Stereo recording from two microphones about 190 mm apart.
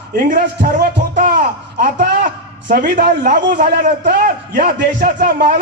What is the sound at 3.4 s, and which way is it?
A man's voice, 50° right (ahead or behind).